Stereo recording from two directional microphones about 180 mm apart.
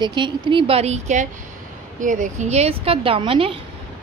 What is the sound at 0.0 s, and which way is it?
A woman's voice, 25° right (ahead or behind).